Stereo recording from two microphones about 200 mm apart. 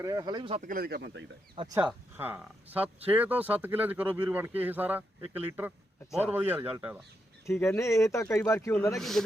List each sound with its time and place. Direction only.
0.0 s speech: 20° right (ahead or behind)
0.6 s speech: 45° right (ahead or behind)
1.5 s speech: 20° right (ahead or behind)
1.8 s a man's voice: 10° right (ahead or behind)
7.4 s speech: 15° left (ahead or behind)
9.0 s a man's voice: centre (ahead or behind)